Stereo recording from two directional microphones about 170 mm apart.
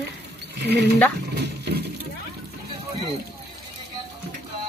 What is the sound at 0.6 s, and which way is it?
Speech, 80° right.